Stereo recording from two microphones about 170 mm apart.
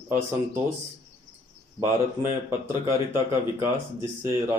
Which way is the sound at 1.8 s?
15° right (ahead or behind).